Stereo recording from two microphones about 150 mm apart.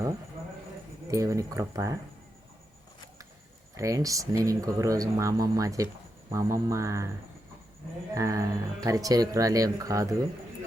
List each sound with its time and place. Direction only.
1.1 s speech: 20° right (ahead or behind)
3.8 s speech: 20° right (ahead or behind)
8.1 s speech: 20° right (ahead or behind)